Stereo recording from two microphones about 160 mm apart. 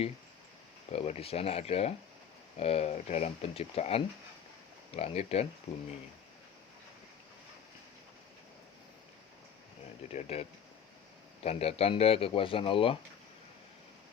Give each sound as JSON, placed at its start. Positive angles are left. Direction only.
{"t": 0.9, "sound": "speech", "side_deg": 40}
{"t": 10.1, "sound": "speech", "side_deg": 45}
{"t": 11.4, "sound": "speech", "side_deg": 40}